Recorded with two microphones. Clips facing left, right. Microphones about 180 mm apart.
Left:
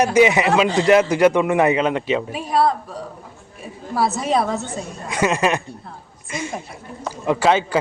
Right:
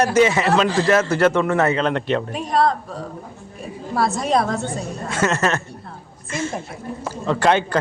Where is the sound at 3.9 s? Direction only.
5° left (ahead or behind).